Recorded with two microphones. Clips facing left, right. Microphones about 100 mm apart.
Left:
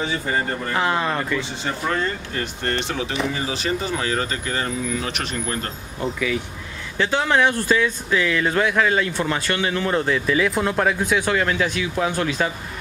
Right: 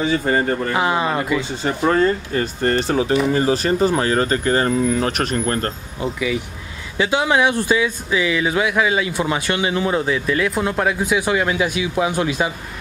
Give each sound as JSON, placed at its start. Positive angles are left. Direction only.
{"t": 0.1, "sound": "speech", "side_deg": -50}
{"t": 0.7, "sound": "speech", "side_deg": -10}
{"t": 1.6, "sound": "speech", "side_deg": -40}
{"t": 5.9, "sound": "speech", "side_deg": -5}